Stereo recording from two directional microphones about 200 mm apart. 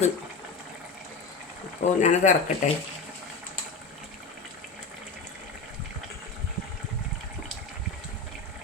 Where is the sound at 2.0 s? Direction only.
35° left (ahead or behind).